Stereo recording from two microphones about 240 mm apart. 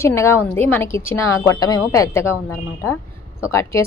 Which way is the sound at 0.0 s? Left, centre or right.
Centre.